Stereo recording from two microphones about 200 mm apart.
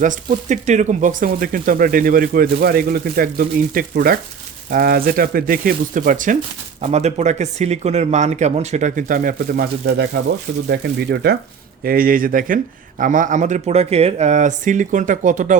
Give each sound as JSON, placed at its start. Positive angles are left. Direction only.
{"t": 0.0, "sound": "speech", "side_deg": -40}